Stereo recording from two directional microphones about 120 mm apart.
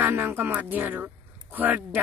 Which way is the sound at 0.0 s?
20° right (ahead or behind).